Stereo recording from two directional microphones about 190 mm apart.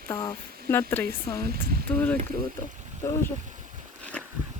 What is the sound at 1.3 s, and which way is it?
Speech, 55° right (ahead or behind).